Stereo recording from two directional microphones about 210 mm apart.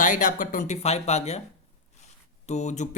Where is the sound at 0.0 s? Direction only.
40° left (ahead or behind).